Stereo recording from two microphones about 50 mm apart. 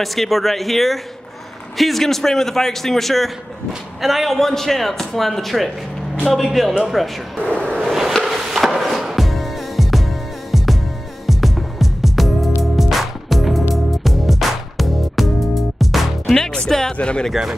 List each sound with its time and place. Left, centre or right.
0.0 s a man's voice: centre
7.4 s a sound: left
7.8 s a sound: centre
8.2 s music: centre
16.3 s music: centre
16.9 s speech: left
17.3 s a man's voice: centre